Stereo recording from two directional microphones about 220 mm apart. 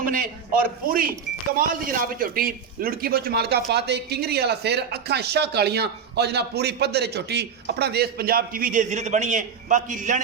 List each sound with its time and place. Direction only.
0.0 s a man's voice: 40° right (ahead or behind)